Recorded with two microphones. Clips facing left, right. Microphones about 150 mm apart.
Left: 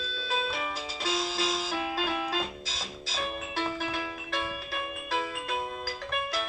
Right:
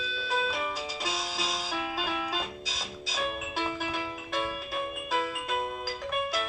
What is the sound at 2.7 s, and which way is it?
Music, 15° right (ahead or behind).